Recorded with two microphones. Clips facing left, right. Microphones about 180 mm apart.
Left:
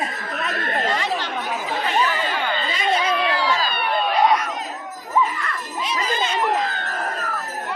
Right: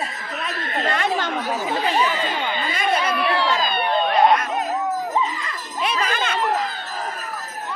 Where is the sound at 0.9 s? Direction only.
50° right (ahead or behind).